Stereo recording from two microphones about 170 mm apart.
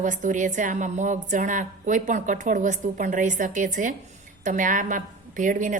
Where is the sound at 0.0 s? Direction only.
50° right (ahead or behind).